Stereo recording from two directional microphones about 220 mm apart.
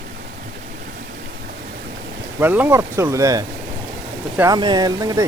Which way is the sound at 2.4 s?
10° right (ahead or behind).